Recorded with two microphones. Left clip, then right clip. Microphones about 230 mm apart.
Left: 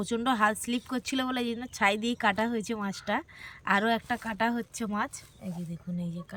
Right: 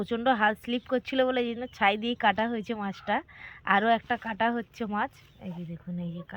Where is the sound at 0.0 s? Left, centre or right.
Centre.